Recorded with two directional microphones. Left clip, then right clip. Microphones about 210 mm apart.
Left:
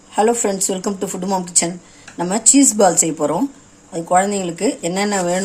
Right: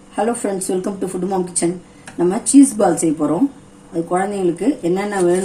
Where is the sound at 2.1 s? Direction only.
45° left (ahead or behind).